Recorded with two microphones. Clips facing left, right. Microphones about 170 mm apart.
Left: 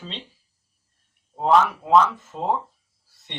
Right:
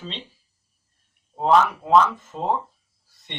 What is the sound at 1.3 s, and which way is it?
Speech, 5° left (ahead or behind).